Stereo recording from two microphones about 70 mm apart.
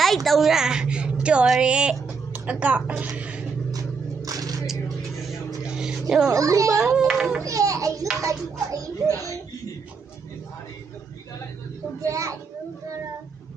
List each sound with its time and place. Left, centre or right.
0.3 s a woman's voice: centre
3.2 s a sound: centre
4.3 s biting: right
5.6 s vehicle: centre
6.3 s a child's voice: right
6.7 s a woman's voice: centre
7.4 s children playing: right
8.2 s a child's voice: right
12.0 s a child's voice: right